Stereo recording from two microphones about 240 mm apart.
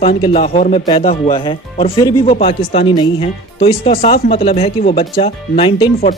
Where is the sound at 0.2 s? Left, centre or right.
Left.